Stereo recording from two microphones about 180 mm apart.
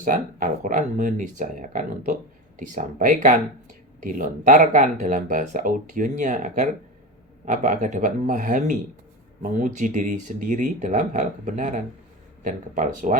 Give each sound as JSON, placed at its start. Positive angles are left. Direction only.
{"t": 0.0, "sound": "speech", "side_deg": -50}